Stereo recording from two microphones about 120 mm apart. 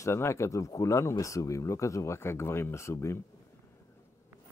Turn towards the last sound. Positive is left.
turn(degrees=25)  # may be behind; listen again after turning